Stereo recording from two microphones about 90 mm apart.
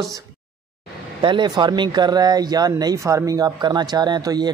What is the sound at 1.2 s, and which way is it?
Speech, 60° right (ahead or behind).